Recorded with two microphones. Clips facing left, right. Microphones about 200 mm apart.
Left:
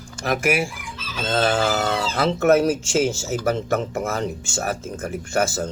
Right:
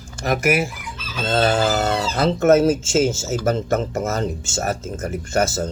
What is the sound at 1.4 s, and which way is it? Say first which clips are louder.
Fowl: right 2 dB; 25° right (ahead or behind).